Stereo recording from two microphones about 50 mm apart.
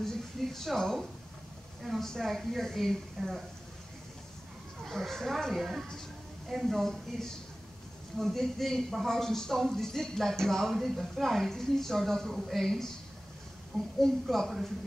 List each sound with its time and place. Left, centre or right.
0.0 s speech: centre
4.8 s a man's voice: centre
13.9 s speech: centre